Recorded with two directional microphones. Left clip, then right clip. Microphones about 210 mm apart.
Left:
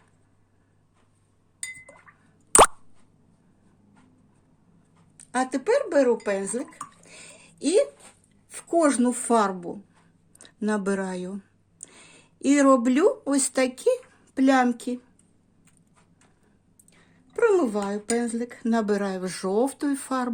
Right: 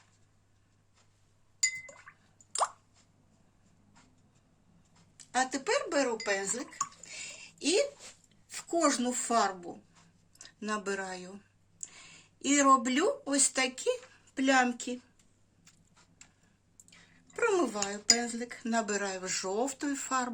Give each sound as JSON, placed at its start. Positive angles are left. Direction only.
{"t": 5.1, "sound": "speech", "side_deg": 50}
{"t": 7.6, "sound": "speech", "side_deg": 50}
{"t": 16.9, "sound": "speech", "side_deg": 40}